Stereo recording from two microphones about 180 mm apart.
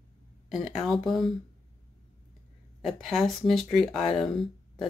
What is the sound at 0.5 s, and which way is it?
Speech, centre (ahead or behind).